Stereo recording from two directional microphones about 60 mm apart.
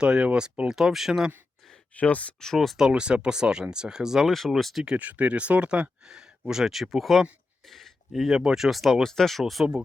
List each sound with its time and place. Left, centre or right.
0.0 s speech: centre
2.0 s speech: left
2.4 s speech: centre
2.7 s speech: centre
4.3 s speech: centre
4.9 s speech: right; by 9.6 s centre